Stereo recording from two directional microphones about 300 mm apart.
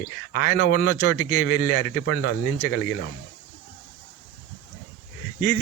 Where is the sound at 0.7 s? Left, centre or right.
Left.